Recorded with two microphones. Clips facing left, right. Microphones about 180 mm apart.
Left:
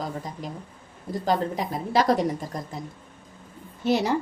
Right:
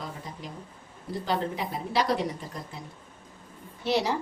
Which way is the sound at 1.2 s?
45° left (ahead or behind).